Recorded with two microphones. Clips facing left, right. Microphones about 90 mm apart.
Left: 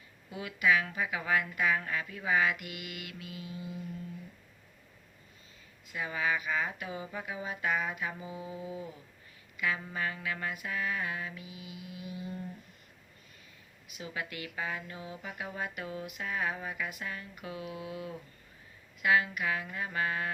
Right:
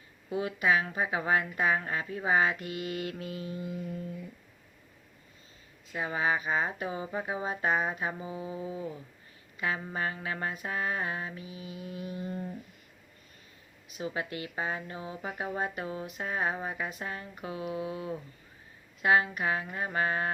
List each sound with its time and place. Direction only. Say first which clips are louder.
0.3 s speech: right 2 dB; 30° right (ahead or behind)
5.9 s speech: right 3 dB; 30° right (ahead or behind)
13.9 s speech: right 5 dB; 35° right (ahead or behind)